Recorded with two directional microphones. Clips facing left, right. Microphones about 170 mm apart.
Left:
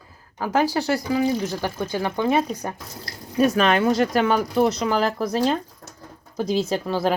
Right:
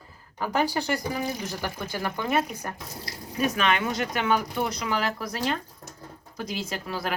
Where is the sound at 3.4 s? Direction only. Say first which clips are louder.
Left 7 dB; 40° left (ahead or behind).